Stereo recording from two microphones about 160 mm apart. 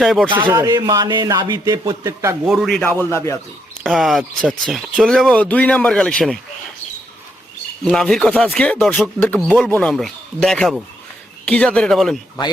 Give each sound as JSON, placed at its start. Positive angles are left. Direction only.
{"t": 0.0, "sound": "speech", "side_deg": 0}
{"t": 0.3, "sound": "speech", "side_deg": -10}
{"t": 0.6, "sound": "speech", "side_deg": -25}
{"t": 2.5, "sound": "speech", "side_deg": 0}
{"t": 2.8, "sound": "speech", "side_deg": 15}
{"t": 3.8, "sound": "speech", "side_deg": 0}
{"t": 7.9, "sound": "speech", "side_deg": 5}